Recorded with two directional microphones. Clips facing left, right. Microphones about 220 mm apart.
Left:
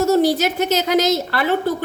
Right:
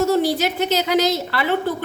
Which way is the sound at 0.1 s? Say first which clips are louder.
Left 3 dB; 45° left (ahead or behind).